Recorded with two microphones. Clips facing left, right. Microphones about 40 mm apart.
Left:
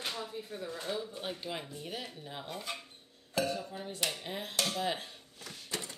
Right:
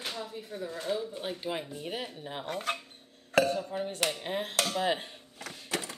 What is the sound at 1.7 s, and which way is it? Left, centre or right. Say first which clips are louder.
Speech: right 5 dB; right.